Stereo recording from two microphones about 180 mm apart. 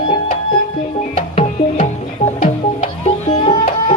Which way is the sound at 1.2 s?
40° left (ahead or behind).